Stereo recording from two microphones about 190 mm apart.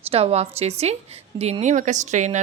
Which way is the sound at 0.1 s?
30° right (ahead or behind).